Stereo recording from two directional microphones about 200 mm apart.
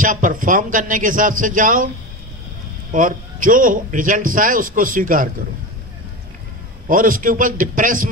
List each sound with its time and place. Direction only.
0.0 s a man's voice: 40° right (ahead or behind)
2.9 s a man's voice: 40° right (ahead or behind)
6.9 s a man's voice: 45° right (ahead or behind)